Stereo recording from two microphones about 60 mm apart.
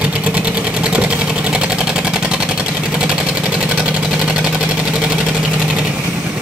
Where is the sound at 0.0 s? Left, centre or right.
Right.